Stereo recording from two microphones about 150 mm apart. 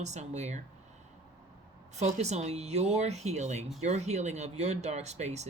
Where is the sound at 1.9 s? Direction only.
50° right (ahead or behind).